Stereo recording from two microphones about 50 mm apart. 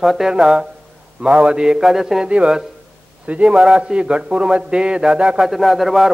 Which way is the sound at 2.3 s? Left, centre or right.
Right.